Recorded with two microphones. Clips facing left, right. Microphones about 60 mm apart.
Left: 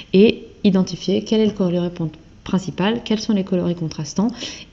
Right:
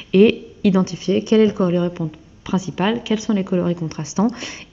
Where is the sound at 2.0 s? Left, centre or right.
Centre; by 4.5 s right.